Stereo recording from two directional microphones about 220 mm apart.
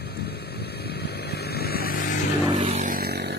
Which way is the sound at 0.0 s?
45° left (ahead or behind).